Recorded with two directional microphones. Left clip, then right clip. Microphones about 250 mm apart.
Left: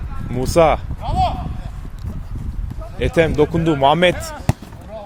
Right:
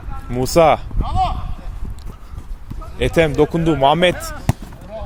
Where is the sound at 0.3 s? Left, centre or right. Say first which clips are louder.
Right 1 dB; centre.